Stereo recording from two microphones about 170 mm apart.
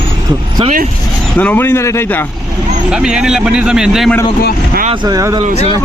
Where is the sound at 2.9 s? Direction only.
5° right (ahead or behind).